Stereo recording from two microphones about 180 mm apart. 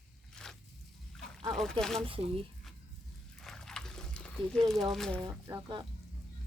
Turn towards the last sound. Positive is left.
turn(degrees=-20)  # may be behind; listen again after turning